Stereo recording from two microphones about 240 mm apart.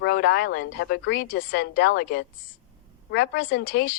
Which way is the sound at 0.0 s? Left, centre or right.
Left.